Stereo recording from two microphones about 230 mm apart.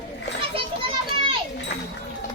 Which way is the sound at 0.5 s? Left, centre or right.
Right.